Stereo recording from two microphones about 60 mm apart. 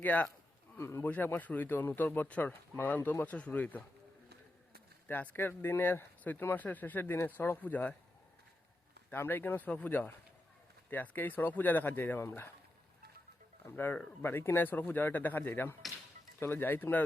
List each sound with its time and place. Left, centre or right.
0.0 s speech: left
0.8 s speech: left
1.0 s speech: left
3.3 s speech: left
5.0 s speech: left
9.0 s speech: left
13.7 s speech: left